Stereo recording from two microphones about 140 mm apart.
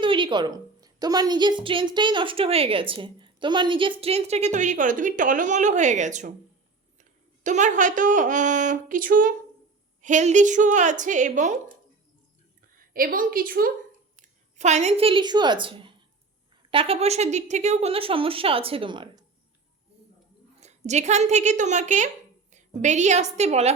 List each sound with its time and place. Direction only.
0.0 s a woman's voice: 35° right (ahead or behind); by 9.3 s 75° right (ahead or behind)
10.0 s a woman's voice: 60° right (ahead or behind)
12.7 s a woman's voice: 90° right
14.2 s a woman's voice: 55° right (ahead or behind); by 19.2 s 35° right (ahead or behind)
20.6 s a woman's voice: 55° right (ahead or behind)